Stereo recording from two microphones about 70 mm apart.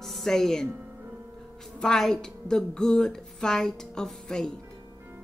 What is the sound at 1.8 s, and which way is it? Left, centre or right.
Speech, centre.